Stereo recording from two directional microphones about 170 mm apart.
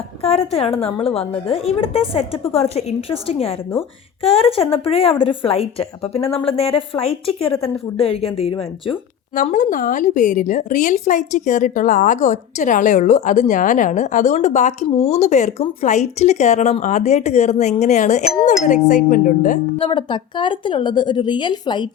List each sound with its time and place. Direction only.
0.2 s a woman's voice: 35° left (ahead or behind)
9.3 s a woman's voice: 50° left (ahead or behind)
19.8 s a woman's voice: 30° left (ahead or behind)